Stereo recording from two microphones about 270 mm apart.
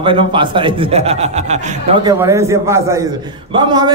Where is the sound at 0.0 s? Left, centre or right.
Centre.